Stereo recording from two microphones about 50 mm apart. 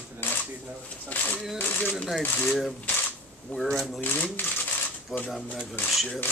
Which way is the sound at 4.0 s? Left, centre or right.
Left.